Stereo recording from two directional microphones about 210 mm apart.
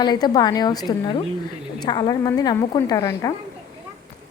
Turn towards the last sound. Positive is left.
turn(degrees=15)  # may be behind; listen again after turning